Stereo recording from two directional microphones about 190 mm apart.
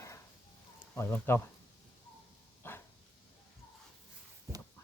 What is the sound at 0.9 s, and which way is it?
Speech, 10° left (ahead or behind).